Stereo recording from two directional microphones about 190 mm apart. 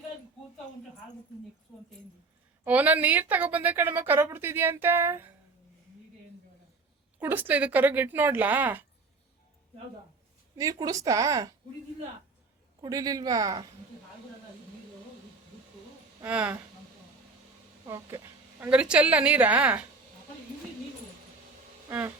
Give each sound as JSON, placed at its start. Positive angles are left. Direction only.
{"t": 2.6, "sound": "a woman's voice", "side_deg": -10}
{"t": 7.2, "sound": "a woman's voice", "side_deg": -10}
{"t": 10.6, "sound": "a woman's voice", "side_deg": -20}
{"t": 12.8, "sound": "a woman's voice", "side_deg": -20}
{"t": 16.2, "sound": "a woman's voice", "side_deg": -5}
{"t": 17.8, "sound": "a woman's voice", "side_deg": -15}
{"t": 21.8, "sound": "a sound", "side_deg": -10}